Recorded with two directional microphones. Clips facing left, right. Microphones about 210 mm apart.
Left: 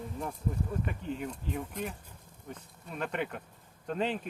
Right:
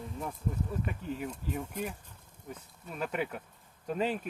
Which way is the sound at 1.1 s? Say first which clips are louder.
Even; 5° right (ahead or behind).